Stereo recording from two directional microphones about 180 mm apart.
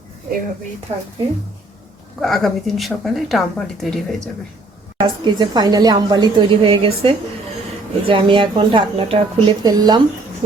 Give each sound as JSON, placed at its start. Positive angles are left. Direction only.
{"t": 0.9, "sound": "a woman's voice", "side_deg": -35}
{"t": 2.2, "sound": "speech", "side_deg": 0}
{"t": 4.9, "sound": "a woman's voice", "side_deg": -25}